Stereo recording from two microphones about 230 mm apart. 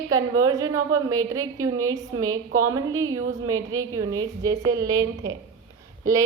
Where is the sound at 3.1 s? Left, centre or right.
Right.